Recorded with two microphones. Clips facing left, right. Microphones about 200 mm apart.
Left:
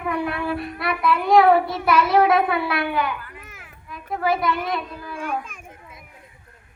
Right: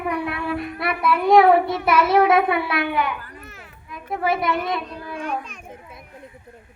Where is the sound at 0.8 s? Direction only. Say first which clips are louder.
Even; 25° right (ahead or behind).